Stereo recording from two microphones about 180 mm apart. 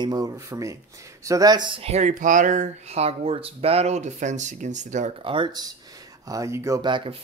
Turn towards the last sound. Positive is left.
turn(degrees=-30)  # may be behind; listen again after turning